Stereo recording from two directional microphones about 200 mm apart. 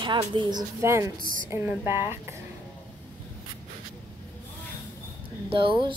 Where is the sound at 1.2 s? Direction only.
45° right (ahead or behind).